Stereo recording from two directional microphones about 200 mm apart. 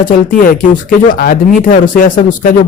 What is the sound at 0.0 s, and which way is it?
Speech, 45° left (ahead or behind).